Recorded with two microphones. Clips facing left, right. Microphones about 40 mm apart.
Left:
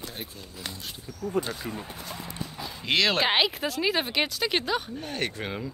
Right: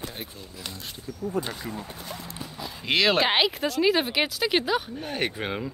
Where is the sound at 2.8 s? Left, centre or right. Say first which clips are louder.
Right 2 dB; centre.